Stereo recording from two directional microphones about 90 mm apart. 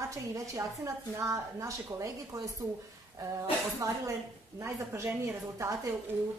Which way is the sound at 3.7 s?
35° right (ahead or behind).